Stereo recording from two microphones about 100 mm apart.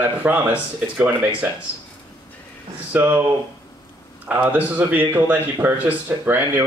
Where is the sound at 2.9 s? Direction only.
15° right (ahead or behind).